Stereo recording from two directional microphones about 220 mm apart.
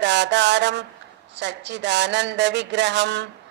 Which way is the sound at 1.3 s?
55° right (ahead or behind).